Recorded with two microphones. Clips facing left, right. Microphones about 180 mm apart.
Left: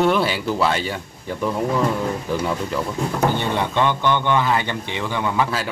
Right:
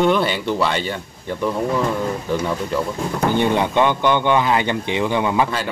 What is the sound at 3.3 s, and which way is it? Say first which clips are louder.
Speech: right 4 dB; 15° right (ahead or behind).